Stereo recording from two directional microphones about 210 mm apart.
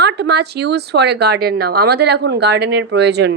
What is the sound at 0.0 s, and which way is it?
A woman's voice, 50° right (ahead or behind).